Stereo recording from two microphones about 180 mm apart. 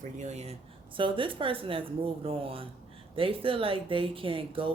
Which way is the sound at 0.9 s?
30° right (ahead or behind).